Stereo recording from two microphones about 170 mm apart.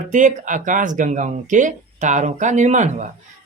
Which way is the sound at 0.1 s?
45° right (ahead or behind).